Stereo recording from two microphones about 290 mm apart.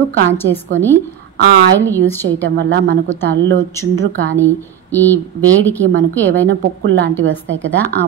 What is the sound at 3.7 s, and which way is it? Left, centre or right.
Speech, centre.